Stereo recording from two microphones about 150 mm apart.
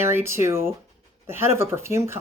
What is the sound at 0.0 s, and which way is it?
Speech, 15° right (ahead or behind).